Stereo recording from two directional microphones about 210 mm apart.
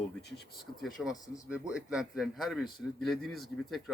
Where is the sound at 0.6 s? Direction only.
Centre (ahead or behind).